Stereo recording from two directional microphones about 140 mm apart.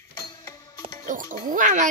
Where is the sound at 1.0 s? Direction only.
70° right (ahead or behind).